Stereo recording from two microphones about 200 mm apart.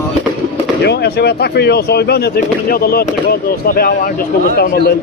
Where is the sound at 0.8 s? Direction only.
55° left (ahead or behind).